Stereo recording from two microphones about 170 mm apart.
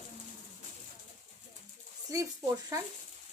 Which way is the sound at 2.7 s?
20° right (ahead or behind).